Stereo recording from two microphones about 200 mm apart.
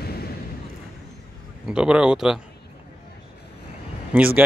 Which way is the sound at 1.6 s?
5° right (ahead or behind).